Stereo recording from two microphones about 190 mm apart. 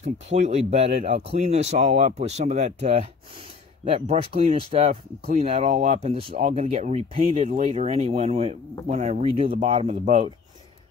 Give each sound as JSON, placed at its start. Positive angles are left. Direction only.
{"t": 0.0, "sound": "speech", "side_deg": -40}